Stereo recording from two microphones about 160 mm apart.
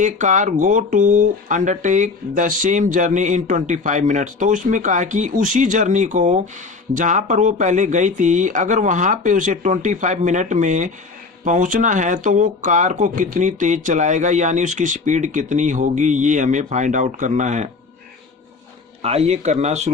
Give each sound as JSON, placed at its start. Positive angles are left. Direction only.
{"t": 0.0, "sound": "speech", "side_deg": -50}
{"t": 19.0, "sound": "speech", "side_deg": -40}